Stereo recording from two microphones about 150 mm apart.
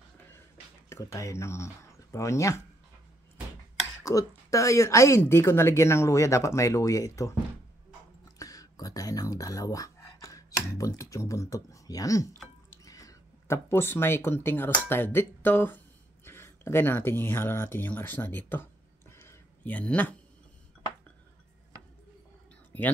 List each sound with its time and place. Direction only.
0.8 s speech: 20° left (ahead or behind)
4.0 s speech: 20° left (ahead or behind)
8.4 s speech: 25° left (ahead or behind)
22.7 s speech: 10° left (ahead or behind)